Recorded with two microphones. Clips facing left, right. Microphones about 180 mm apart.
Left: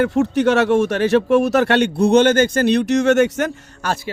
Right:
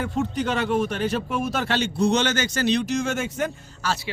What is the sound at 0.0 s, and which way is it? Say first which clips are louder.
Speech: left 9 dB; 80° left.